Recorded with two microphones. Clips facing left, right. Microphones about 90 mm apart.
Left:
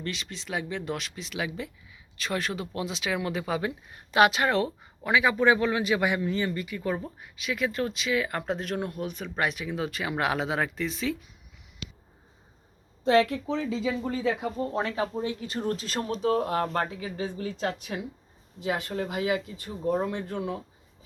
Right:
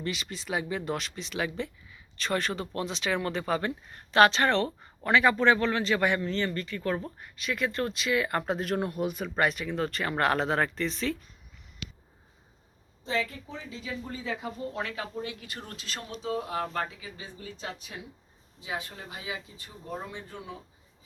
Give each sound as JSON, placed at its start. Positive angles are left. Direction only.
{"t": 0.0, "sound": "speech", "side_deg": -5}
{"t": 13.1, "sound": "speech", "side_deg": 80}
{"t": 14.6, "sound": "speech", "side_deg": 35}
{"t": 15.7, "sound": "speech", "side_deg": 40}